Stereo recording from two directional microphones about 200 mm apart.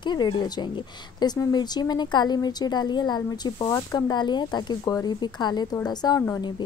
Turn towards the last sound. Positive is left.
turn(degrees=15)  # may be behind; listen again after turning